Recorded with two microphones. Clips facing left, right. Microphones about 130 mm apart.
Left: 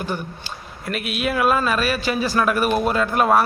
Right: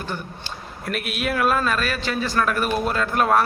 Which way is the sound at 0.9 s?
Centre (ahead or behind).